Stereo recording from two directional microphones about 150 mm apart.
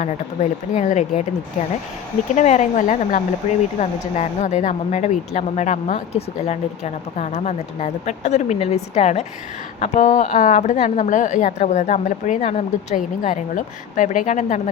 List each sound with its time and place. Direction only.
0.7 s speech: 50° left (ahead or behind)
2.3 s speech: 50° left (ahead or behind)